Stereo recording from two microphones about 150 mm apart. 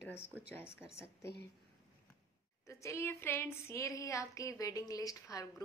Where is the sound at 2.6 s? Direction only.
20° left (ahead or behind).